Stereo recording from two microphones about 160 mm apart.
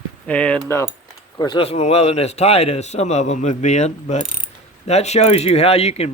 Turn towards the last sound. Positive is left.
turn(degrees=40)  # may be behind; listen again after turning